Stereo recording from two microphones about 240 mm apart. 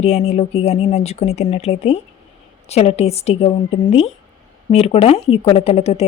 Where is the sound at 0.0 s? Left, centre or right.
Left.